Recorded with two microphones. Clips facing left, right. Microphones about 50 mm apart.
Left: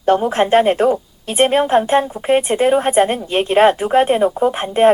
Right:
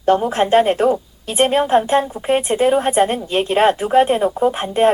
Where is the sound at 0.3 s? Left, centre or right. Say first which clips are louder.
Left 1 dB; centre.